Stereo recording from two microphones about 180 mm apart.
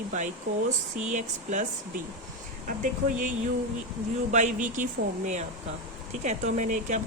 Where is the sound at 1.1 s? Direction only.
40° right (ahead or behind).